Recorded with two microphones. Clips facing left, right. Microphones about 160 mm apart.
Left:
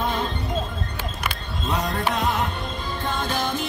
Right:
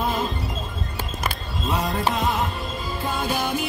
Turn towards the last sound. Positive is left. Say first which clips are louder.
# right 1 dB
turn(degrees=-10)  # may be behind; listen again after turning